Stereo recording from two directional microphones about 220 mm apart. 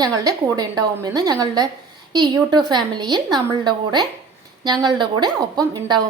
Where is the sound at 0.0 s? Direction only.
15° right (ahead or behind).